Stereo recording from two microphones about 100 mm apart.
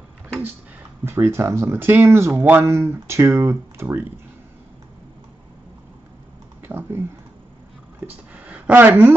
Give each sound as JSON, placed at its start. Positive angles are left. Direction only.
{"t": 1.0, "sound": "speech", "side_deg": -25}
{"t": 6.6, "sound": "a sound", "side_deg": -20}
{"t": 8.5, "sound": "speech", "side_deg": -15}